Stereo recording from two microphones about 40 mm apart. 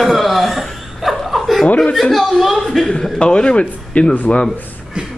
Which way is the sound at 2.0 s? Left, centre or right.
Centre.